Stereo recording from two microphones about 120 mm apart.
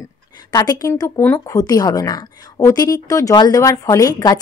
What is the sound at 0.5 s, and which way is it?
Speech, 30° left (ahead or behind).